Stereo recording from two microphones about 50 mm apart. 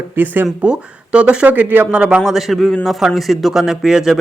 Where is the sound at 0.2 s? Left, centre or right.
Right.